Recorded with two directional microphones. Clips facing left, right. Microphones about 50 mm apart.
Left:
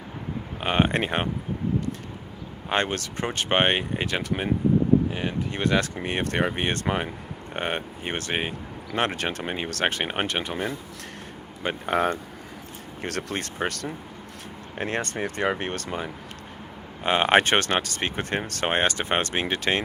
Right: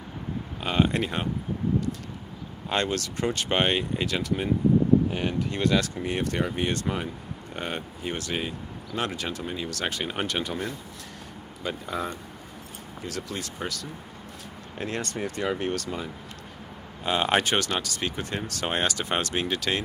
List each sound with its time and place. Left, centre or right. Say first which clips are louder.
0.6 s speech: left 2 dB; left
2.6 s speech: left 1 dB; left
11.6 s speech: left 7 dB; left
14.8 s speech: left 3 dB; left